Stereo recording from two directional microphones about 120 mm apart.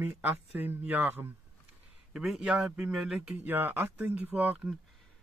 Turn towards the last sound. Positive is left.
turn(degrees=-15)  # may be behind; listen again after turning